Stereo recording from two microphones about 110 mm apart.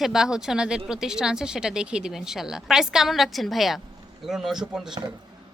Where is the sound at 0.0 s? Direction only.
5° right (ahead or behind).